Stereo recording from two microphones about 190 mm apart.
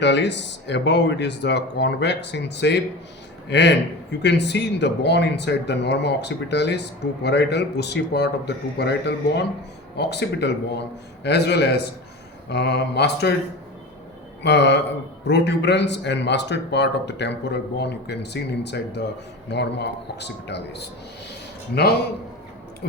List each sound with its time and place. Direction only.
0.0 s speech: 65° left (ahead or behind)
14.4 s speech: 65° left (ahead or behind)